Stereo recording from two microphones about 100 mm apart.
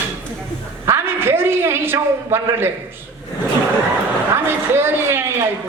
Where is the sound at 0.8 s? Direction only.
25° right (ahead or behind).